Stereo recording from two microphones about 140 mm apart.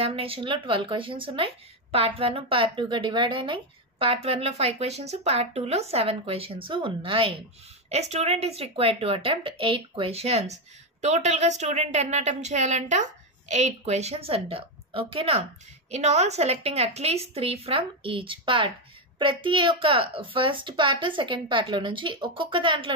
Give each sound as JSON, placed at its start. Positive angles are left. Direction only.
{"t": 0.0, "sound": "a woman's voice", "side_deg": -40}